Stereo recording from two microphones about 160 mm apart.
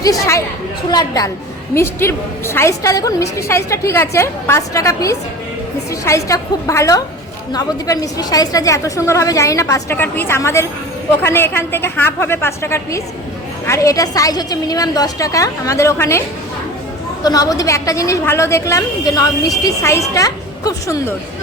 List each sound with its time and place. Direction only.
0.0 s a woman's voice: 20° left (ahead or behind)
17.2 s a woman's voice: 25° left (ahead or behind)